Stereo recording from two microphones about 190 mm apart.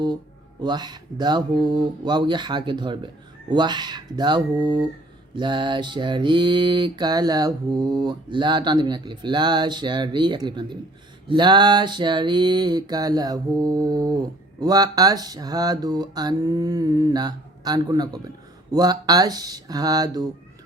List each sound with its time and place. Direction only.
0.6 s mantra: 20° right (ahead or behind)